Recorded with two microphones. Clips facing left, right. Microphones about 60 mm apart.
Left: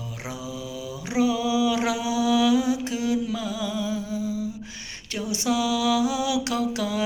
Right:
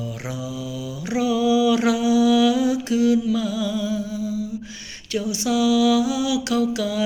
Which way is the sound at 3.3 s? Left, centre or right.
Left.